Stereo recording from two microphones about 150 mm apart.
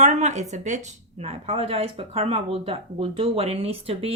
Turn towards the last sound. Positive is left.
turn(degrees=-40)  # may be behind; listen again after turning